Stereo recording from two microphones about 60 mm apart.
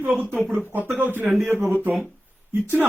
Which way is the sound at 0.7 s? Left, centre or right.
Right.